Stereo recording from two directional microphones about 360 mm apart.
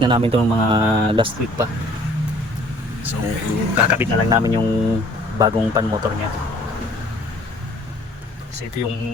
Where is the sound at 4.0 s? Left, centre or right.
Centre.